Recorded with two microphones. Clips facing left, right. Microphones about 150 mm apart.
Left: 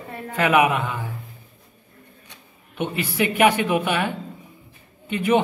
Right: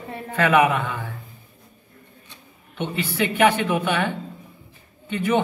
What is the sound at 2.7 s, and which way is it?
A woman's voice, 10° left (ahead or behind).